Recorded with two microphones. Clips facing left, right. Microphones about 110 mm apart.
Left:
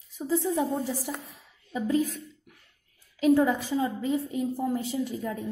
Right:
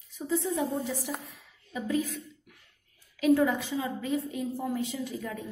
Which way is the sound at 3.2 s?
35° left (ahead or behind).